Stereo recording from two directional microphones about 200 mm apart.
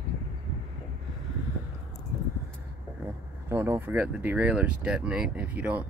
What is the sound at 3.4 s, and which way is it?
Speech, 10° right (ahead or behind).